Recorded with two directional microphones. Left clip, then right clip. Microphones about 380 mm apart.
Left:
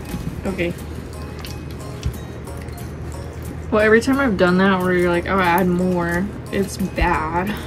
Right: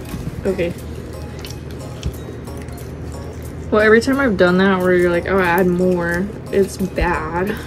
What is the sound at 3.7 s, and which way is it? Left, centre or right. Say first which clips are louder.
Speech: right 2 dB; centre.